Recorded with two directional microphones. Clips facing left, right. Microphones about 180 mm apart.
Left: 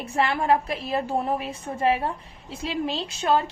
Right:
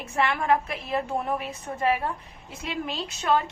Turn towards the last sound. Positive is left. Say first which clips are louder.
# left 2 dB
turn(degrees=30)  # may be behind; listen again after turning